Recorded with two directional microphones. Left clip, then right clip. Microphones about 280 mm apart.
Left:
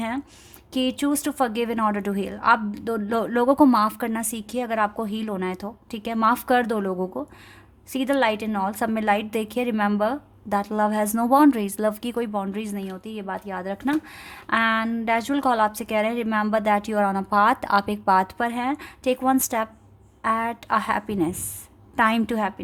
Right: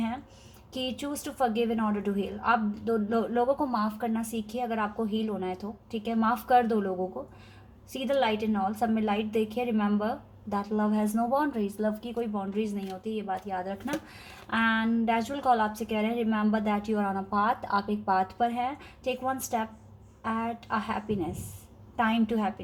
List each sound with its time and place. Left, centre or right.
0.7 s a woman's voice: left
7.9 s a woman's voice: left